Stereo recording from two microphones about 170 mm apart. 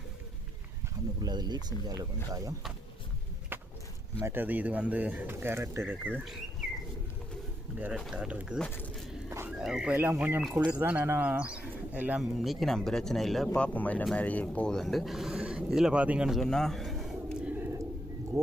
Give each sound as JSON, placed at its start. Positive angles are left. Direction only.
{"t": 1.2, "sound": "speech", "side_deg": -25}
{"t": 3.5, "sound": "a sound", "side_deg": -10}
{"t": 4.2, "sound": "speech", "side_deg": -10}
{"t": 7.8, "sound": "speech", "side_deg": -10}
{"t": 9.0, "sound": "dog", "side_deg": 0}
{"t": 9.3, "sound": "pig", "side_deg": -15}
{"t": 9.6, "sound": "speech", "side_deg": -5}